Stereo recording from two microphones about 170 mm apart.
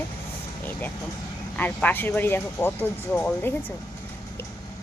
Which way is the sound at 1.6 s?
10° left (ahead or behind).